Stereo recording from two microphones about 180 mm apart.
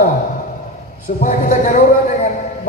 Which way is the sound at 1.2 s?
50° left (ahead or behind).